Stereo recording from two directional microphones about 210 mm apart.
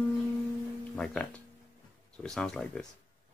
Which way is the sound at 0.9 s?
5° left (ahead or behind).